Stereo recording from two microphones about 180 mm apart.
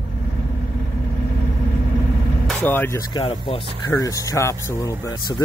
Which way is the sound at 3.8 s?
20° left (ahead or behind).